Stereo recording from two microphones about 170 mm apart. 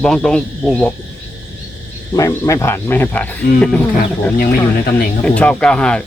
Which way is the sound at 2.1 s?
20° left (ahead or behind).